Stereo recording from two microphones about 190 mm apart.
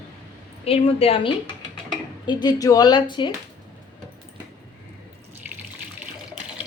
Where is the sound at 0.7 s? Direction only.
30° left (ahead or behind).